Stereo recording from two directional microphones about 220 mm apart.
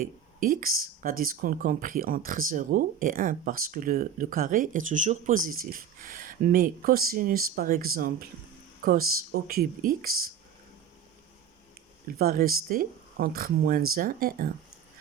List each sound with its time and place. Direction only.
0.0 s speech: 40° right (ahead or behind)
12.2 s speech: 40° right (ahead or behind)